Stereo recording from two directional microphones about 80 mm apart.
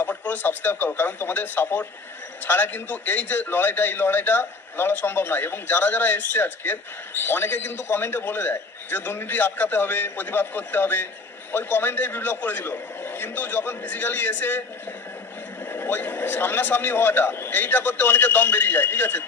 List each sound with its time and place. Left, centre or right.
0.0 s a man's voice: left
15.7 s a man's voice: left